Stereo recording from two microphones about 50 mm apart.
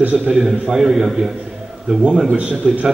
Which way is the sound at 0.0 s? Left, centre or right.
Right.